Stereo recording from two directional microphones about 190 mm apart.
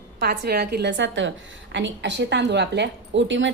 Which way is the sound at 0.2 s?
55° right (ahead or behind).